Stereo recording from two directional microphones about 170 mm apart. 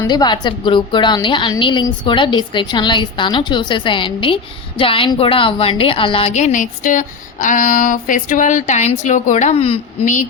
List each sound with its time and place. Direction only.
0.0 s a woman's voice: 25° left (ahead or behind); by 10.2 s 40° left (ahead or behind)